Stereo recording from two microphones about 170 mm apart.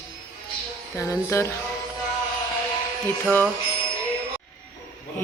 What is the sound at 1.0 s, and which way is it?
Speech, 15° left (ahead or behind).